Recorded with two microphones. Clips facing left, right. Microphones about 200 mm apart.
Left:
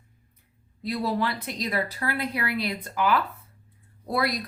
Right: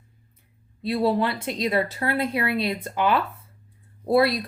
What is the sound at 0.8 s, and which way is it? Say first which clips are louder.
A woman's voice: right 5 dB; 30° right (ahead or behind).